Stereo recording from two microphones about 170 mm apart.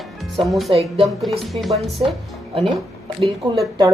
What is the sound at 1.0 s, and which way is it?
Speech, centre (ahead or behind).